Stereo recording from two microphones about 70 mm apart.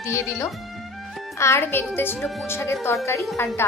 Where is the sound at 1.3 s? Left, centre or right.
Left.